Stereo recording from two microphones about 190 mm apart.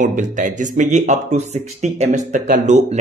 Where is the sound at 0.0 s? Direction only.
45° right (ahead or behind).